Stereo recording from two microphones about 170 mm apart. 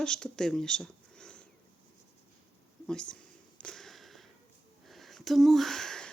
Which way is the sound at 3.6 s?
5° left (ahead or behind).